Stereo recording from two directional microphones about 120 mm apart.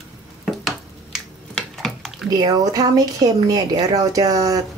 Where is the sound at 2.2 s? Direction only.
30° right (ahead or behind).